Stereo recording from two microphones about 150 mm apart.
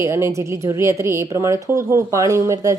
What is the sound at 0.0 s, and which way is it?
Speech, 20° right (ahead or behind).